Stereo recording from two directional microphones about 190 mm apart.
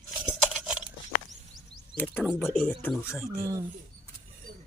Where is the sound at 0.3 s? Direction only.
Centre (ahead or behind).